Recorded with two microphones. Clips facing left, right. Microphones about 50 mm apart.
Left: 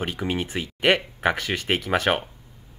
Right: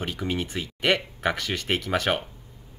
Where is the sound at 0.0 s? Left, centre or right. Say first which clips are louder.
Left 2 dB; left.